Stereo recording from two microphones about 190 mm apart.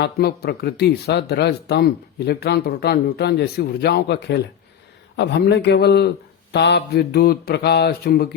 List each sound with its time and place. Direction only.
0.0 s speech: 55° left (ahead or behind)